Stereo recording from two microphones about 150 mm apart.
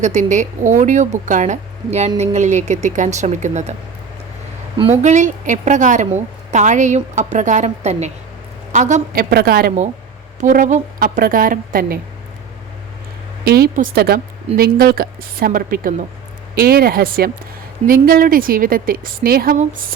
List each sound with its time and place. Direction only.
0.0 s a woman's voice: 50° right (ahead or behind)
5.0 s a woman's voice: 55° right (ahead or behind)
9.3 s speech: 90° right
10.4 s a woman's voice: 60° right (ahead or behind)
11.2 s a woman's voice: 70° right (ahead or behind)
13.4 s speech: 90° right; by 16.0 s 65° right (ahead or behind)
16.6 s a woman's voice: 80° right
19.5 s a woman's voice: 65° right (ahead or behind)